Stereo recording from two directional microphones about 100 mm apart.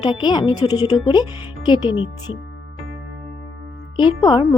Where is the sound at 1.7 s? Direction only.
60° left (ahead or behind).